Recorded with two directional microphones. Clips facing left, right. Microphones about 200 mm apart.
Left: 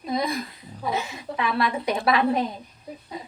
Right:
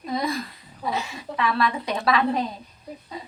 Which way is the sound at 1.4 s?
20° left (ahead or behind).